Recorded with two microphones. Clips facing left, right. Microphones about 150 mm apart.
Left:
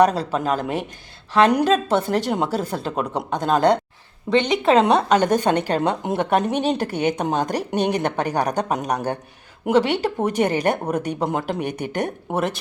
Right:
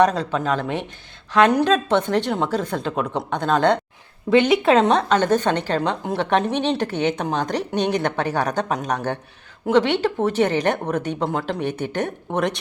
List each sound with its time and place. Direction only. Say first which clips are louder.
0.6 s speech: left 1 dB; 10° left (ahead or behind)
2.0 s speech: right 1 dB; 40° left (ahead or behind)
2.3 s speech: even; 10° left (ahead or behind)
4.3 s speech: right 2 dB; 5° right (ahead or behind); by 6.2 s 15° left (ahead or behind)
6.5 s a woman's voice: left 1 dB; 45° left (ahead or behind)
6.7 s speech: even; 10° left (ahead or behind)